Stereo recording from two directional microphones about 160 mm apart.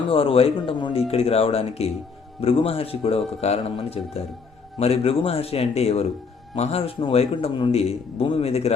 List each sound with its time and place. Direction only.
0.1 s a man's voice: 35° left (ahead or behind)